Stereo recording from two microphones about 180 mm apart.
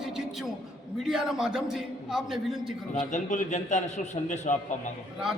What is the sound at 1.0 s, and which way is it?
A man's voice, 5° right (ahead or behind).